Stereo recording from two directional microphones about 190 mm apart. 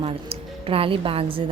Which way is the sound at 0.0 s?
30° right (ahead or behind).